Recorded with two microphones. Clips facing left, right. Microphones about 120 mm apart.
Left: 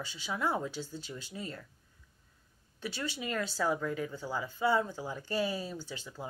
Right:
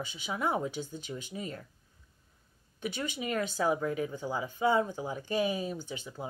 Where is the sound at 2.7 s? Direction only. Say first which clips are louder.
Right 2 dB; 15° right (ahead or behind).